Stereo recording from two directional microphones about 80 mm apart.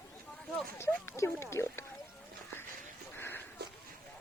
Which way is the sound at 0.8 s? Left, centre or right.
Left.